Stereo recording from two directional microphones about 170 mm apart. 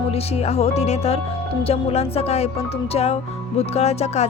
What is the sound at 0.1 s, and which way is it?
Speech, 35° left (ahead or behind).